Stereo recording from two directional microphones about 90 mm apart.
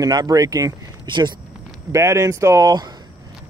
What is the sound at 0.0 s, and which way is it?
Speech, 45° right (ahead or behind).